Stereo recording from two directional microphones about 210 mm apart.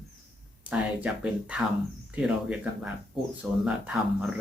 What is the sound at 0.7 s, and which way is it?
Speech, 5° right (ahead or behind).